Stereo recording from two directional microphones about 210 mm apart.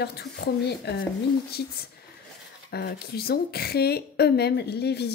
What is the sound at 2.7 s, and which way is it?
A woman's voice, 50° left (ahead or behind).